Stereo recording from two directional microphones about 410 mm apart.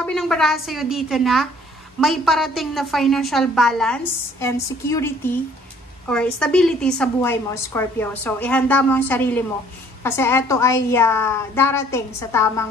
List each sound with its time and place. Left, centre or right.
0.0 s a woman's voice: centre